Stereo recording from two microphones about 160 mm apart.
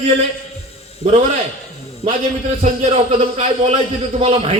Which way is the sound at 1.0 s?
35° right (ahead or behind).